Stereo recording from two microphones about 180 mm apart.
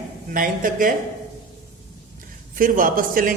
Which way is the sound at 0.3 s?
50° right (ahead or behind).